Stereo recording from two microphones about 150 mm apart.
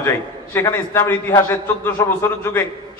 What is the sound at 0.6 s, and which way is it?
A man's voice, 15° left (ahead or behind).